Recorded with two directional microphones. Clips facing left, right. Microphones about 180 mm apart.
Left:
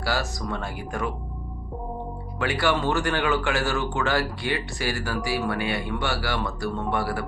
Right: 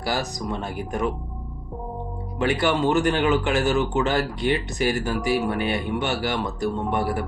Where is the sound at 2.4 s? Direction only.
20° right (ahead or behind).